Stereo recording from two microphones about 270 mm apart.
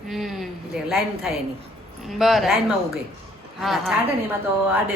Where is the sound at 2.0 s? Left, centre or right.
Centre.